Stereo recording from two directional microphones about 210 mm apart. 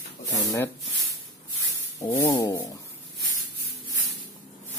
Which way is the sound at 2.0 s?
15° left (ahead or behind).